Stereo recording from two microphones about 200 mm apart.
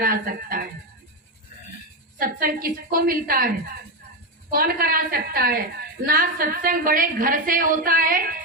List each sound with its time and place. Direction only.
0.0 s speech: 45° right (ahead or behind)
2.1 s a woman's voice: 45° right (ahead or behind)
4.5 s a woman's voice: 50° right (ahead or behind)